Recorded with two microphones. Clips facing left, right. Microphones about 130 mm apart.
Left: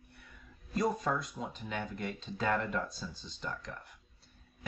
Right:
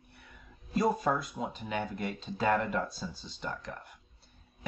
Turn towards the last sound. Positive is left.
turn(degrees=-5)  # may be behind; listen again after turning